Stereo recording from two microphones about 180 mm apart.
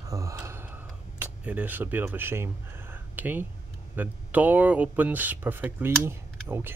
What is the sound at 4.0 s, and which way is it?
Speech, 10° right (ahead or behind).